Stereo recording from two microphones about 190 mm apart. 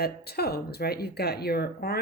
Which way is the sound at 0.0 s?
55° left (ahead or behind).